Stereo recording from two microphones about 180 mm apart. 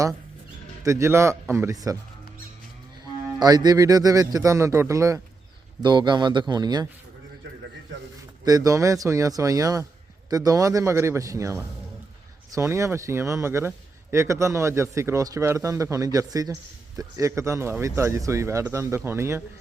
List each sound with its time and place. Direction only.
0.8 s speech: 15° right (ahead or behind)
3.4 s speech: 20° right (ahead or behind)
8.4 s speech: 20° right (ahead or behind)